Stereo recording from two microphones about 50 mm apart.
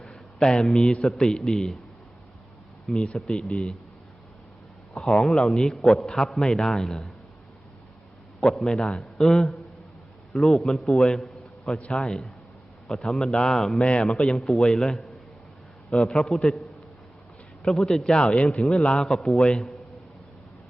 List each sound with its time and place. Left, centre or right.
0.0 s a sound: centre
1.2 s a man's voice: centre
3.1 s a man's voice: centre
4.9 s a man's voice: centre
8.4 s a man's voice: centre
9.2 s a man's voice: centre
15.9 s a man's voice: left
16.1 s a man's voice: centre
17.7 s a man's voice: centre